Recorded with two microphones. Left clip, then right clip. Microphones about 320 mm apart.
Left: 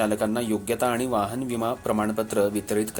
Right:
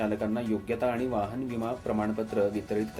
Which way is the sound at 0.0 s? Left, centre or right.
Left.